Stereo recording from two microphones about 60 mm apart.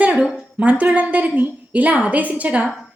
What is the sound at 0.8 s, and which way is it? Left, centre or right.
A woman's voice, right.